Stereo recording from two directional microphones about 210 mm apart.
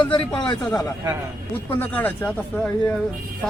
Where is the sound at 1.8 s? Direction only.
10° left (ahead or behind).